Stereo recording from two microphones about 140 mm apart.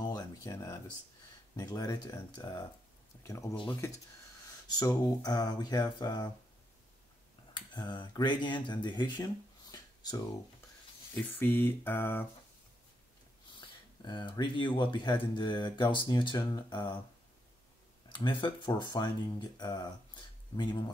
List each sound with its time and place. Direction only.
0.0 s a sound: 25° left (ahead or behind)
1.6 s speech: 25° left (ahead or behind)
4.7 s speech: 25° left (ahead or behind)
7.5 s speech: 35° left (ahead or behind)
11.1 s speech: 10° left (ahead or behind)
13.6 s speech: 35° left (ahead or behind)
18.0 s speech: 35° left (ahead or behind)